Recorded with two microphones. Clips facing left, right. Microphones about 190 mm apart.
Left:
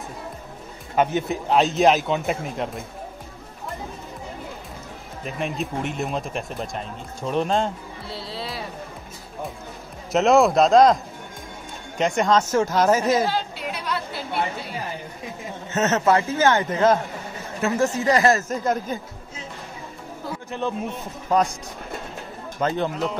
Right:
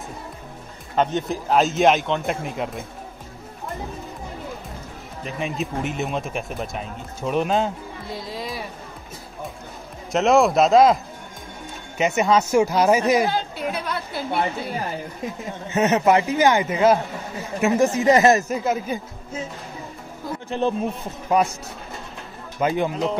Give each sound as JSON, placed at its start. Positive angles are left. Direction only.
{"t": 0.9, "sound": "speech", "side_deg": 5}
{"t": 5.2, "sound": "speech", "side_deg": 0}
{"t": 10.1, "sound": "speech", "side_deg": 0}
{"t": 12.0, "sound": "speech", "side_deg": -5}
{"t": 13.3, "sound": "chatter", "side_deg": -50}
{"t": 15.7, "sound": "speech", "side_deg": -15}
{"t": 18.5, "sound": "speech", "side_deg": -5}
{"t": 20.4, "sound": "speech", "side_deg": -30}
{"t": 21.3, "sound": "speech", "side_deg": -10}
{"t": 22.6, "sound": "speech", "side_deg": -10}